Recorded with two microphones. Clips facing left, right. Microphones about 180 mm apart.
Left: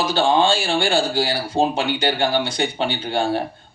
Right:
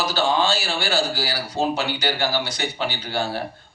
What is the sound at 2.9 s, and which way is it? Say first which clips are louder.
Speech: left 5 dB; 25° left (ahead or behind).